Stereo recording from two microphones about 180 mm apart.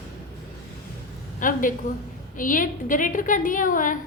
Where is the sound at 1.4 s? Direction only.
50° left (ahead or behind).